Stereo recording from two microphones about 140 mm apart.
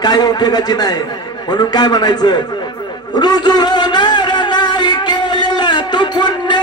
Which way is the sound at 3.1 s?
30° left (ahead or behind).